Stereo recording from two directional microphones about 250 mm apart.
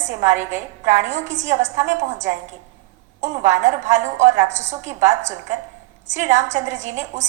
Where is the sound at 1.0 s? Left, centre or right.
Right.